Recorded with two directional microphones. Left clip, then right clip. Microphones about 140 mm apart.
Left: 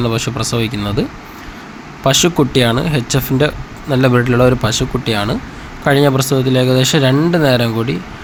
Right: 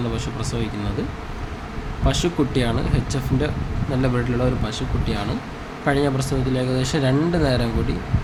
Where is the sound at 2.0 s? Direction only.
45° left (ahead or behind).